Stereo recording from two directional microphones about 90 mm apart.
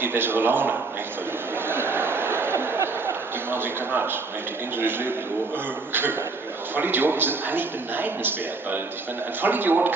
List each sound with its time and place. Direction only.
0.0 s a man's voice: 25° right (ahead or behind)
1.7 s a sound: 25° right (ahead or behind)
3.4 s a man's voice: 25° right (ahead or behind)
6.7 s a man's voice: 20° right (ahead or behind)